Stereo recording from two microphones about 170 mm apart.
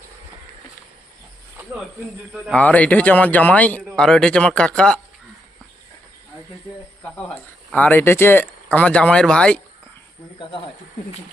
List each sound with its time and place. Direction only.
2.3 s a man's voice: 5° left (ahead or behind)
7.0 s a man's voice: 10° left (ahead or behind)
10.3 s speech: 30° left (ahead or behind)